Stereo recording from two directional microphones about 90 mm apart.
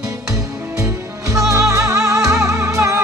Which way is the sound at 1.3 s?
35° right (ahead or behind).